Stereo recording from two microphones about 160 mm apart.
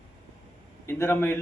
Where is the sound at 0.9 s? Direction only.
15° left (ahead or behind).